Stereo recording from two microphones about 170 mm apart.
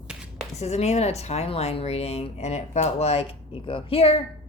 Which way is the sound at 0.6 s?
40° left (ahead or behind).